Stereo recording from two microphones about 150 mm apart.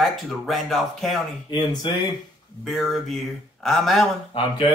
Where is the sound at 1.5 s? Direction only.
25° left (ahead or behind).